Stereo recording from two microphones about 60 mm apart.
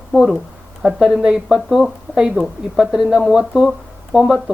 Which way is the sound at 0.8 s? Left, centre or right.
Centre.